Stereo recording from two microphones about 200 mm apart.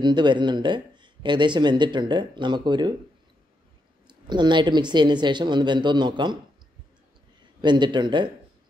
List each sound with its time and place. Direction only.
0.0 s speech: 20° right (ahead or behind)
4.1 s speech: 20° right (ahead or behind)
7.6 s speech: 20° right (ahead or behind)